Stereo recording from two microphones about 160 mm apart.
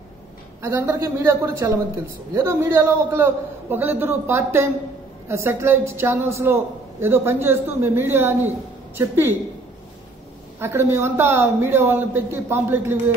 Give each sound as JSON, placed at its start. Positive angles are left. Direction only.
{"t": 0.6, "sound": "a man's voice", "side_deg": -15}
{"t": 10.6, "sound": "a man's voice", "side_deg": -15}